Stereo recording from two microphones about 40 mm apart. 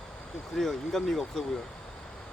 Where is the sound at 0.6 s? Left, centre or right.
Centre.